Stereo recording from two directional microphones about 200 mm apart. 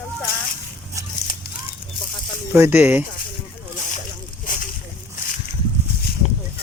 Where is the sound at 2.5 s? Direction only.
10° right (ahead or behind).